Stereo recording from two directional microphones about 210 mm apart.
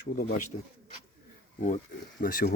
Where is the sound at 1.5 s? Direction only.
35° left (ahead or behind).